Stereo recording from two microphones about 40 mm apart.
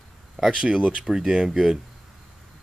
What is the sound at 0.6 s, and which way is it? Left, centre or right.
Speech, right.